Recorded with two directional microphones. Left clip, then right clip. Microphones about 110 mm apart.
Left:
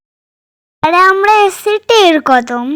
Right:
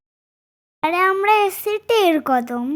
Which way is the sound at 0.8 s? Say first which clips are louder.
Left 9 dB; 25° left (ahead or behind).